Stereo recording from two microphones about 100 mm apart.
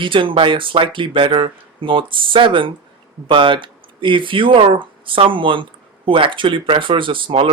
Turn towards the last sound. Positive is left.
turn(degrees=-60)  # may be behind; listen again after turning